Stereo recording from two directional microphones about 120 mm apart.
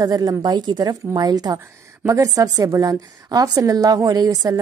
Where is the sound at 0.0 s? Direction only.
30° right (ahead or behind).